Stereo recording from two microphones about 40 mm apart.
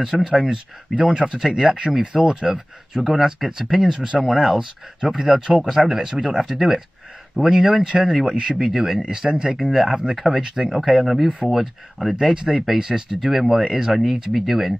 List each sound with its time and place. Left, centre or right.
0.0 s speech: centre
1.1 s speech: right
1.4 s speech: centre
2.2 s speech: centre
3.0 s speech: centre
3.9 s speech: right
13.2 s speech: centre
14.3 s speech: centre